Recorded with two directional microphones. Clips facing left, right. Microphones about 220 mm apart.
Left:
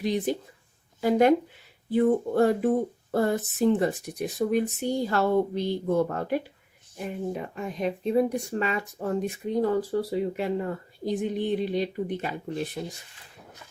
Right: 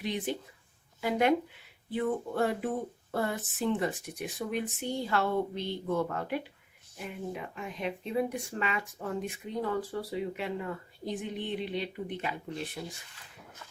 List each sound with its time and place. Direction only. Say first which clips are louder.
0.0 s speech: left 7 dB; 40° left (ahead or behind)
1.9 s speech: left 9 dB; 40° left (ahead or behind)